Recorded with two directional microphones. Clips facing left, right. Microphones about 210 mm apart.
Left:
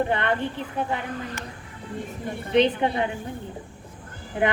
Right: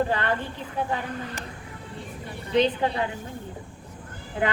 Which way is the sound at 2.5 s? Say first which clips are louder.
Left 2 dB; 20° left (ahead or behind).